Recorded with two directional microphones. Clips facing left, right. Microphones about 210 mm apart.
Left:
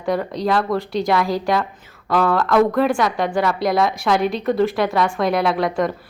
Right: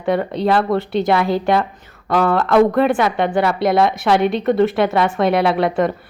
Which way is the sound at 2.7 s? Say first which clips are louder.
Right 2 dB; centre (ahead or behind).